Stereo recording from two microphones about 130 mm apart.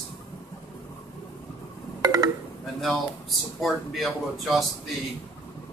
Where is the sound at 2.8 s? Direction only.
Centre (ahead or behind).